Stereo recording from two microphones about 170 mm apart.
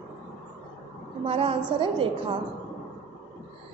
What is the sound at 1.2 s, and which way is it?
A woman's voice, 35° right (ahead or behind).